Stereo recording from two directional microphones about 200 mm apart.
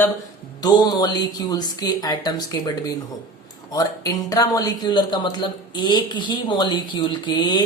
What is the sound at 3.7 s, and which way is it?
Speech, 20° left (ahead or behind).